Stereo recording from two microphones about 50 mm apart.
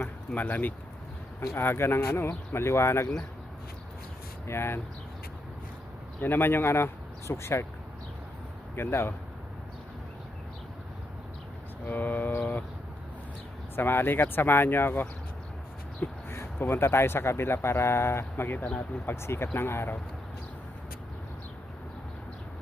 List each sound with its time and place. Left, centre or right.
0.3 s speech: left
1.4 s speech: left
4.4 s speech: left
6.1 s speech: left
8.7 s speech: left
11.9 s speech: left
13.7 s speech: left
16.3 s a sound: left
16.6 s speech: left